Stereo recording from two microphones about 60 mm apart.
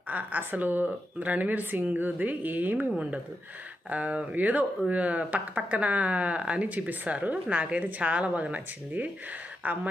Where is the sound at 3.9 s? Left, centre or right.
Right.